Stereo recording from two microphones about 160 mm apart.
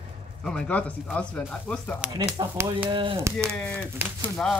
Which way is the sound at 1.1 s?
5° left (ahead or behind).